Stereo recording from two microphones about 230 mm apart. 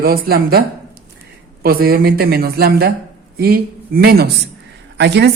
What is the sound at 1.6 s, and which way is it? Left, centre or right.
A woman's voice, right.